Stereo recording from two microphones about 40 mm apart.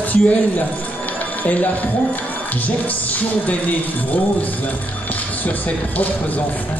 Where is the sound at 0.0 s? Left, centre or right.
Left.